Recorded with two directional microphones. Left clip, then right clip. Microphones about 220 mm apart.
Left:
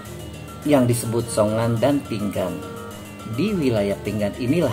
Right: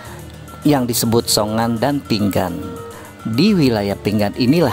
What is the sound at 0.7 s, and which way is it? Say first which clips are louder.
Speech: right 2 dB; 50° right (ahead or behind).